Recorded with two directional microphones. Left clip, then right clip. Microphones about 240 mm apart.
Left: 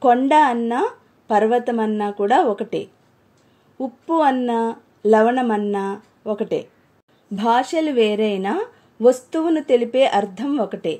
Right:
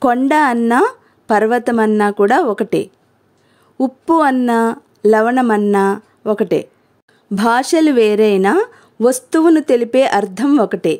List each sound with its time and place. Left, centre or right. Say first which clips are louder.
0.0 s a woman's voice: right 1 dB; right